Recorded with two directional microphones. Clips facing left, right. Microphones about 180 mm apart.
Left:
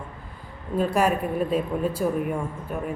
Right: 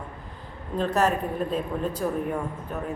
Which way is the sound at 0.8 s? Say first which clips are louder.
Left 1 dB; 10° left (ahead or behind).